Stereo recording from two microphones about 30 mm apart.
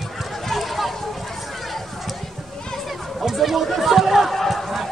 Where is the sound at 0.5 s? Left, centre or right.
Centre.